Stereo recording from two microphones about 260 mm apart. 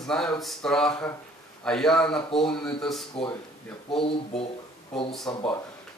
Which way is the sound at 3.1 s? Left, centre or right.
Centre.